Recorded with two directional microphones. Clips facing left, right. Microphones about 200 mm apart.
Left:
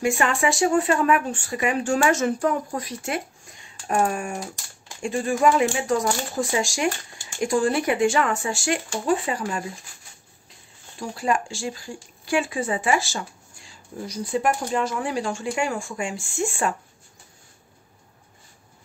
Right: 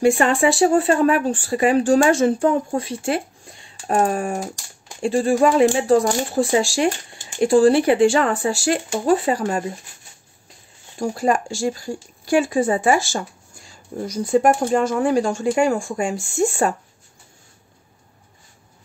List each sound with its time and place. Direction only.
0.0 s speech: 30° right (ahead or behind)
11.0 s speech: 40° right (ahead or behind)